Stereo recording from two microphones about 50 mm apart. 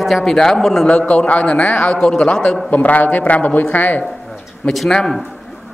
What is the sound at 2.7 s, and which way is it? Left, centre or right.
Speech, left.